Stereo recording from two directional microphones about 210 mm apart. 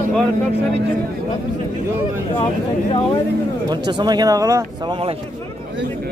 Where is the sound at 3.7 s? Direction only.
20° right (ahead or behind).